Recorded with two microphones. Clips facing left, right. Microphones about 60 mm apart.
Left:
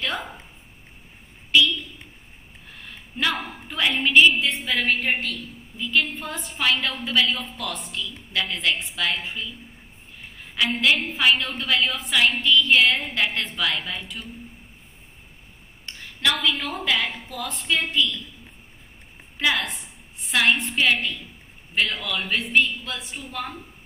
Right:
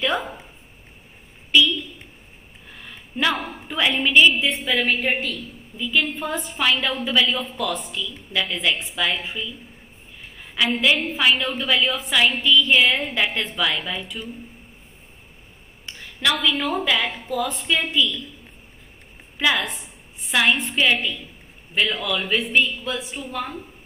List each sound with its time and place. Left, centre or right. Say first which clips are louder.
0.0 s a sound: right 5 dB; centre
2.8 s a sound: right 3 dB; centre
3.6 s a woman's voice: right 2 dB; centre
10.5 s a woman's voice: right 2 dB; centre
16.3 s a woman's voice: right 3 dB; centre
19.3 s a woman's voice: right 2 dB; centre